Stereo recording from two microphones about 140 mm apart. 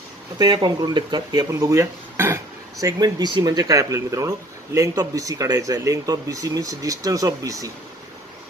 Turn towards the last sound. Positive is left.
turn(degrees=-25)  # may be behind; listen again after turning